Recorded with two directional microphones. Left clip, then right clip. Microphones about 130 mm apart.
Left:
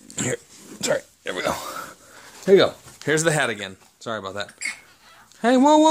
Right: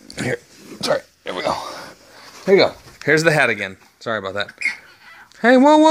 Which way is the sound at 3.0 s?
5° right (ahead or behind).